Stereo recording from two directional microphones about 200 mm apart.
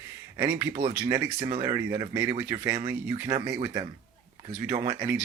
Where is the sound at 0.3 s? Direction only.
15° right (ahead or behind).